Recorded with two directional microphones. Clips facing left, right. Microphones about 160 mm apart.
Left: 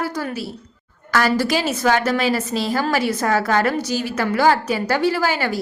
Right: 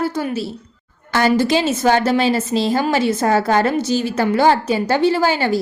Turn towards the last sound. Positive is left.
turn(degrees=-25)  # may be behind; listen again after turning